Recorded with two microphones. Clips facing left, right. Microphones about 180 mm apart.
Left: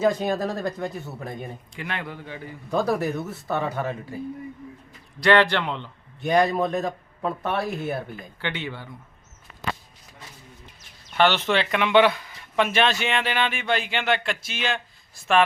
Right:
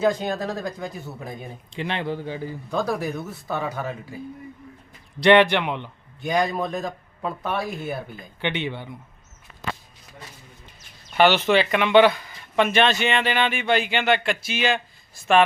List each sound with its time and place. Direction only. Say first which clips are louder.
0.0 s a man's voice: even; 5° left (ahead or behind)
1.7 s speech: right 8 dB; 25° right (ahead or behind)
2.6 s a man's voice: left 3 dB; 5° left (ahead or behind)
5.2 s a man's voice: right 3 dB; 20° right (ahead or behind)
6.2 s a man's voice: left 3 dB; centre (ahead or behind)
8.4 s speech: right 5 dB; 20° right (ahead or behind)
11.2 s a man's voice: right 3 dB; 5° right (ahead or behind)